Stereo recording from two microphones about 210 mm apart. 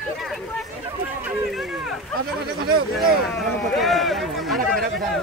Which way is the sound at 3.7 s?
Centre (ahead or behind).